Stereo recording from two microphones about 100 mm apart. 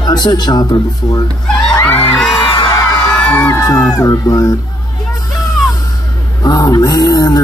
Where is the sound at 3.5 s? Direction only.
40° left (ahead or behind).